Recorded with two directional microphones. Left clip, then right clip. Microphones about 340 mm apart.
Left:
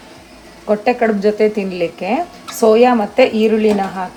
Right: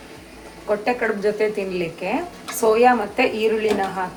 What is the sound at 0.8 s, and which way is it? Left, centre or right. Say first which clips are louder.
Speech: left 7 dB; left.